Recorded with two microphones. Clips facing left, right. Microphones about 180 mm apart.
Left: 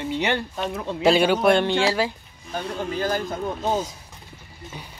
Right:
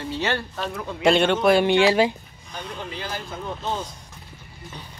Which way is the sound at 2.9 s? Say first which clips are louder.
Left 10 dB; 45° left (ahead or behind).